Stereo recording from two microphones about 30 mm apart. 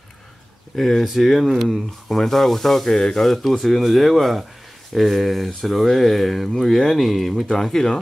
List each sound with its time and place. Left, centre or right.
0.7 s speech: centre
7.5 s speech: centre